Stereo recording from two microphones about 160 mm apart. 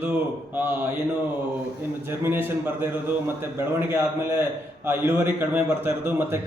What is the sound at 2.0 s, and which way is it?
A man's voice, 15° right (ahead or behind).